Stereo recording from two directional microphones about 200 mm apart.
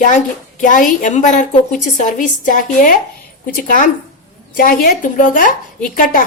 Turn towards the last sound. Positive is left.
turn(degrees=45)  # may be behind; listen again after turning